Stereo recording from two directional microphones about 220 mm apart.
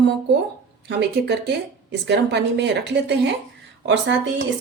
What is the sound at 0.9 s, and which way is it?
Speech, 50° right (ahead or behind).